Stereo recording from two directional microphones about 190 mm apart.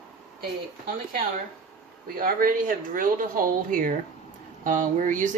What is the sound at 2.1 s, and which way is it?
Speech, 50° right (ahead or behind).